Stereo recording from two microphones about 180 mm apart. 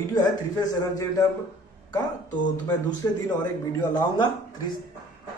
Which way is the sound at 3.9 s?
25° left (ahead or behind).